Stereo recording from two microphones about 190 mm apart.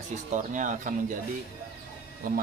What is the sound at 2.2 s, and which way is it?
Speech, 50° right (ahead or behind).